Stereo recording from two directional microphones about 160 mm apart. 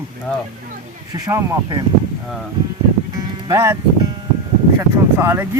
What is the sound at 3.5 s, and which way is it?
Speech, 20° right (ahead or behind).